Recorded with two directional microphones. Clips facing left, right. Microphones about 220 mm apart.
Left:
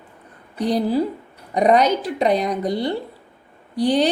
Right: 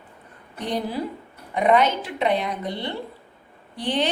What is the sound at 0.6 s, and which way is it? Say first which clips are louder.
A woman's voice: left 7 dB; 35° left (ahead or behind).